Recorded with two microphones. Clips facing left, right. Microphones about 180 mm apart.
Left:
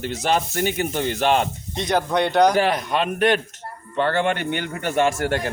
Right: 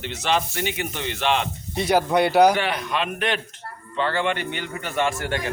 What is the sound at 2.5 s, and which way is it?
A man's voice, 40° left (ahead or behind).